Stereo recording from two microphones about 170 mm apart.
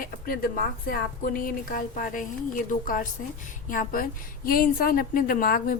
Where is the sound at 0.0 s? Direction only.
60° left (ahead or behind).